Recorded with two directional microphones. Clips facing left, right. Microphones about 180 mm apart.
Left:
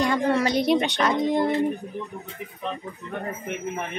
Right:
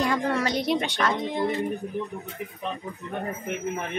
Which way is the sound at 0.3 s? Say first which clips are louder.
Left 4 dB; 10° left (ahead or behind).